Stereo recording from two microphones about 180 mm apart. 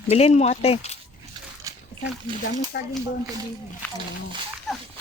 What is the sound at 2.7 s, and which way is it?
Speech, 65° left (ahead or behind).